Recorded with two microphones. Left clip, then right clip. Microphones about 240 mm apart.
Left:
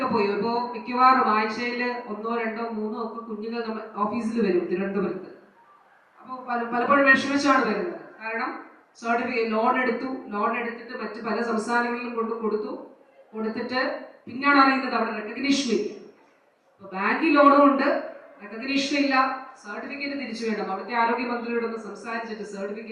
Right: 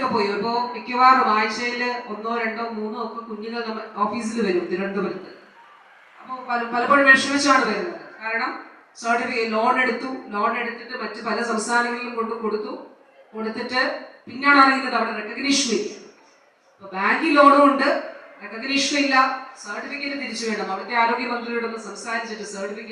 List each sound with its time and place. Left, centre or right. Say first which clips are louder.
0.0 s a man's voice: right 2 dB; centre
2.8 s a man's voice: right 2 dB; left
3.4 s a man's voice: right 2 dB; centre
6.5 s a man's voice: right 3 dB; centre